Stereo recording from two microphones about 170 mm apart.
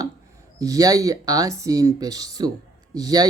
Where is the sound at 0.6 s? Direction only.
20° right (ahead or behind).